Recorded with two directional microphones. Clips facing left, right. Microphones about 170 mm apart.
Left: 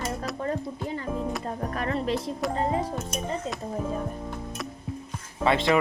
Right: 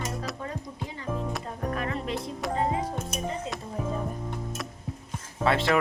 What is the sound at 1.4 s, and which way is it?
Music, 40° left (ahead or behind).